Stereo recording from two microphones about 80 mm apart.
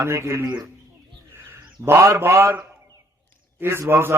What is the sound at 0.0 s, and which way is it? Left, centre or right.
Speech, right.